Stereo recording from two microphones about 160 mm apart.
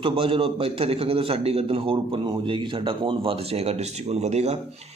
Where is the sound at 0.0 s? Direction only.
35° right (ahead or behind).